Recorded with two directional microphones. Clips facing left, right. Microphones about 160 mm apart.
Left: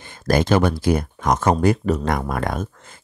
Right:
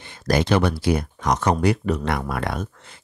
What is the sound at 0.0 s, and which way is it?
Speech, 45° left (ahead or behind).